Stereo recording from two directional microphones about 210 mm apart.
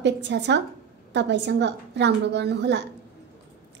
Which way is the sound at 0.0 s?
55° right (ahead or behind).